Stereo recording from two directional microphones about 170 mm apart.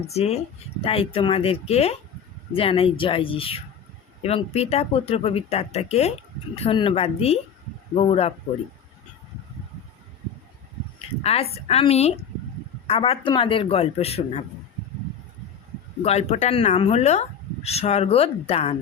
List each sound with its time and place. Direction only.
0.1 s speech: 40° left (ahead or behind)
11.2 s a woman's voice: 35° left (ahead or behind)
16.0 s speech: 40° left (ahead or behind)